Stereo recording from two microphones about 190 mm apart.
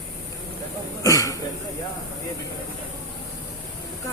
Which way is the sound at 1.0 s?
20° left (ahead or behind).